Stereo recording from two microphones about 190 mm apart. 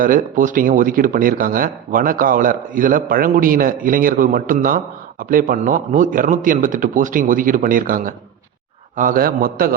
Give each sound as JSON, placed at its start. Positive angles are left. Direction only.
{"t": 0.0, "sound": "speech", "side_deg": -45}